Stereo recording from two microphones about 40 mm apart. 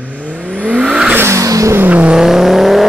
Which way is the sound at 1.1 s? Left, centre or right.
Right.